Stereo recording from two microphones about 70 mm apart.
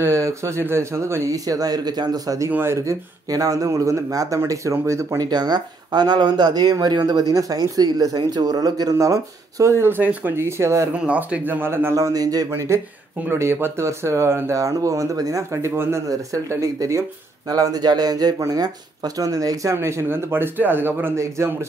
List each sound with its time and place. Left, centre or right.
0.0 s speech: right
2.5 s speech: right
2.8 s speech: right
5.2 s speech: right
8.9 s speech: right
9.8 s speech: right
10.9 s speech: centre
11.6 s speech: right
11.9 s speech: right
12.4 s speech: right
15.5 s speech: right
17.5 s speech: right
19.7 s speech: right
21.2 s speech: right